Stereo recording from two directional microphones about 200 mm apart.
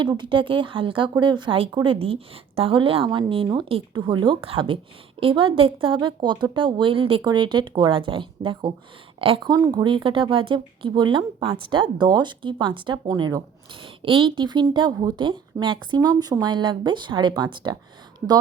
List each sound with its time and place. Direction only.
0.0 s speech: 25° right (ahead or behind)